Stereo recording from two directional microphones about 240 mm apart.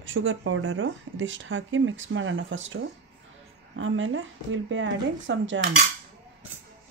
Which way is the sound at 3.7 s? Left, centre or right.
Right.